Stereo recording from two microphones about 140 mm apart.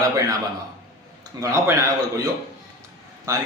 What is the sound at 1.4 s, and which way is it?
A man's voice, 20° right (ahead or behind).